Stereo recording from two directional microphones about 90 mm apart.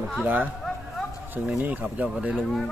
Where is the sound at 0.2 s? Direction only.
20° right (ahead or behind).